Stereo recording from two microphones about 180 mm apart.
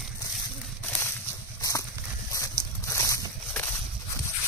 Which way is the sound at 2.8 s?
15° left (ahead or behind).